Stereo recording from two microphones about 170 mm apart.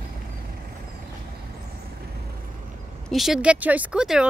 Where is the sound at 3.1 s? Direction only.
Centre (ahead or behind).